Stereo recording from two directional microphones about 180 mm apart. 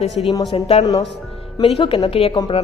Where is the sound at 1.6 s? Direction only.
30° left (ahead or behind).